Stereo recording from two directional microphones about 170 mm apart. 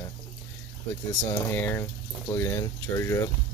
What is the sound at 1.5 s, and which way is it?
Speech, 15° left (ahead or behind).